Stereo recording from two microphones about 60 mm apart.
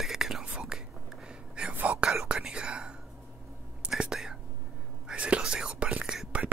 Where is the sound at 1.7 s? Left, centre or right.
Right.